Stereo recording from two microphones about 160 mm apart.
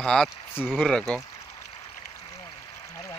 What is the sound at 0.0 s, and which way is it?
Speech, 5° left (ahead or behind).